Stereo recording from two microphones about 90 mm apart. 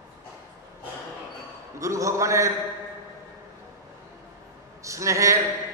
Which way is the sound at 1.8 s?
35° right (ahead or behind).